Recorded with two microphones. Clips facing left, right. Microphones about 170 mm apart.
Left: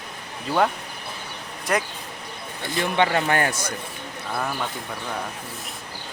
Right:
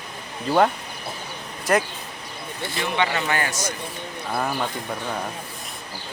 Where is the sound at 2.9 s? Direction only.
50° left (ahead or behind).